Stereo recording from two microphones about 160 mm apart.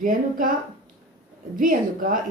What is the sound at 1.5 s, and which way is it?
Speech, 60° right (ahead or behind).